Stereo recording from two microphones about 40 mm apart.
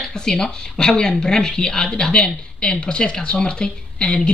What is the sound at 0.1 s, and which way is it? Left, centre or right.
A woman's voice, centre.